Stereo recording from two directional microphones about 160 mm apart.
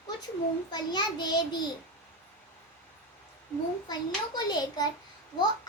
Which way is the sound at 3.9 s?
25° left (ahead or behind).